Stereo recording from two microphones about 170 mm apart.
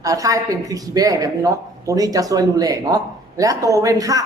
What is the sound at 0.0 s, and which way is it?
A woman's voice, 20° right (ahead or behind).